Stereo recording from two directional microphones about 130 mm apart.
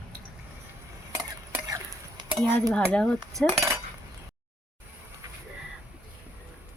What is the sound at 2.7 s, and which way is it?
Speech, 10° left (ahead or behind).